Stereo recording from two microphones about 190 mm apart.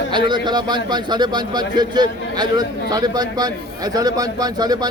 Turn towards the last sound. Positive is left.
turn(degrees=-20)  # may be behind; listen again after turning